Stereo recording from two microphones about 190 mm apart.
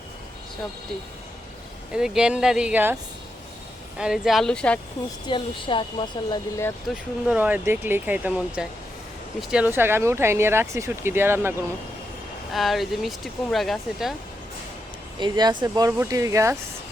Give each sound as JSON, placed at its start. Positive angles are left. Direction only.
{"t": 1.9, "sound": "speech", "side_deg": -5}
{"t": 5.2, "sound": "speech", "side_deg": 25}
{"t": 6.8, "sound": "speech", "side_deg": -5}
{"t": 12.5, "sound": "speech", "side_deg": 0}
{"t": 15.2, "sound": "speech", "side_deg": -20}